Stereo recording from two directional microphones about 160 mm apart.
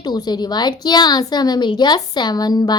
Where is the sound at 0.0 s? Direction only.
25° left (ahead or behind).